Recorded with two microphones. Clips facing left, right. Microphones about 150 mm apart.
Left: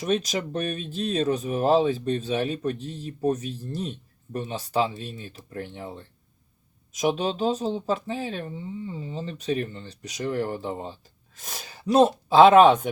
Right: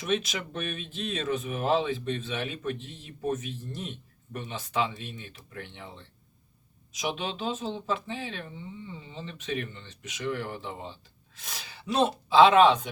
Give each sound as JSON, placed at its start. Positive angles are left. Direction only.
{"t": 0.0, "sound": "speech", "side_deg": 40}